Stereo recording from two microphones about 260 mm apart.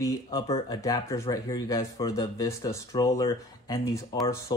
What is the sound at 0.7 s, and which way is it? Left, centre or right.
Speech, centre.